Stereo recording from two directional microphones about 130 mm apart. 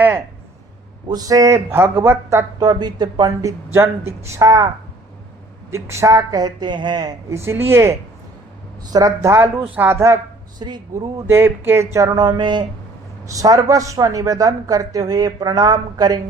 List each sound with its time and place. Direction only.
1.0 s speech: 30° right (ahead or behind)
5.7 s speech: 20° right (ahead or behind)
10.6 s speech: 35° right (ahead or behind)
11.3 s speech: 15° right (ahead or behind); by 12.6 s 35° right (ahead or behind)
13.2 s speech: 25° right (ahead or behind)